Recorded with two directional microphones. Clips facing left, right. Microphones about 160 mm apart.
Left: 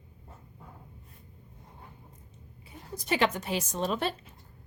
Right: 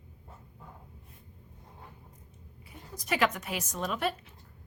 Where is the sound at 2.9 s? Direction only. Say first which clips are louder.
Left 1 dB; 30° left (ahead or behind).